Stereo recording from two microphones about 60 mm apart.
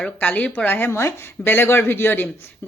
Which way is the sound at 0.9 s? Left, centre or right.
Left.